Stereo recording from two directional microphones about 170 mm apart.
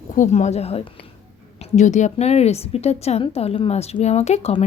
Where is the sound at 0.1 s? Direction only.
45° left (ahead or behind).